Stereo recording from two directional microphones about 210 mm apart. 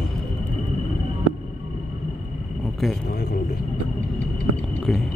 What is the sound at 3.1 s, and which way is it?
Speech, 50° left (ahead or behind).